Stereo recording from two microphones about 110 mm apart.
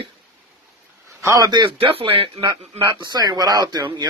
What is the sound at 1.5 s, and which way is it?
Speech, 50° right (ahead or behind).